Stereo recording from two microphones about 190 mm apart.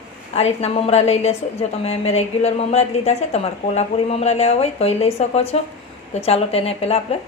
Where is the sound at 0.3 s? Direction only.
35° left (ahead or behind).